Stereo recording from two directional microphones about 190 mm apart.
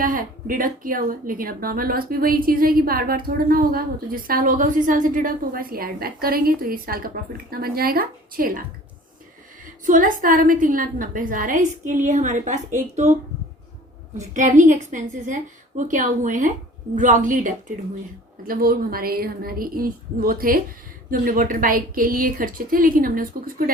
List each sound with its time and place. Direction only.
0.0 s speech: 45° right (ahead or behind)
9.8 s speech: 45° right (ahead or behind)
14.2 s a woman's voice: 40° right (ahead or behind)